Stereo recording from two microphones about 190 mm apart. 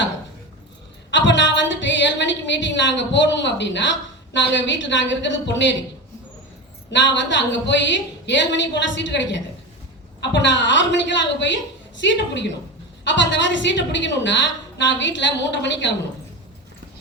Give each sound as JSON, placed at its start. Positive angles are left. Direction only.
{"t": 1.1, "sound": "a woman's voice", "side_deg": 70}
{"t": 6.9, "sound": "a woman's voice", "side_deg": 70}